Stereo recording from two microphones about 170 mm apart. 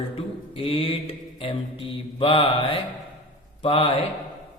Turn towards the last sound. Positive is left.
turn(degrees=35)  # may be behind; listen again after turning